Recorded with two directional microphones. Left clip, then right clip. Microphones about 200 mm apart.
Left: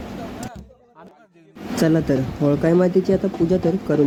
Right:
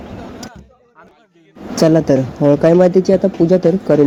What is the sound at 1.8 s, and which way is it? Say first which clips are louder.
Speech: right 7 dB; 10° right (ahead or behind).